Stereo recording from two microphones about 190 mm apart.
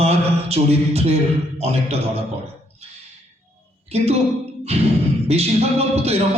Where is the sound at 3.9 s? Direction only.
35° right (ahead or behind).